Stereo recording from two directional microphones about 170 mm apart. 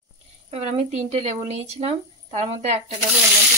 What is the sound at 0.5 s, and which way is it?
Speech, 40° right (ahead or behind).